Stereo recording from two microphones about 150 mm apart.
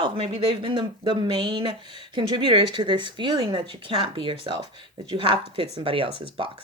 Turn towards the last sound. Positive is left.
turn(degrees=-35)  # may be behind; listen again after turning